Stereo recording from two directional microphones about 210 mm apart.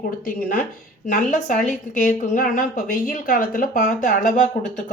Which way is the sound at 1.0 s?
35° left (ahead or behind).